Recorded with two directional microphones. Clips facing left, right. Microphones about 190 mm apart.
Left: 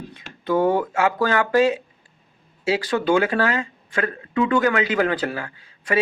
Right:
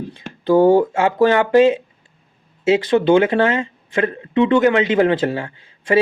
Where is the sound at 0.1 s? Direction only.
30° right (ahead or behind).